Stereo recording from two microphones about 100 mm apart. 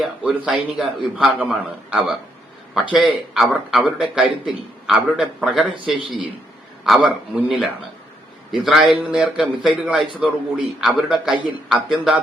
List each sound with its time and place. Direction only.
0.3 s a man's voice: 10° right (ahead or behind)
7.0 s a man's voice: 10° right (ahead or behind)